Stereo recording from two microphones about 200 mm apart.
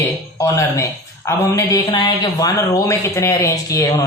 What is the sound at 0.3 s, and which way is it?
Speech, 15° left (ahead or behind).